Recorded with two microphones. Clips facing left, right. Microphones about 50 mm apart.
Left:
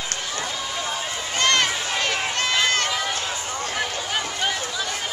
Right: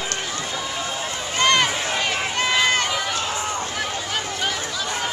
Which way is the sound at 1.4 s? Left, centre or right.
Centre.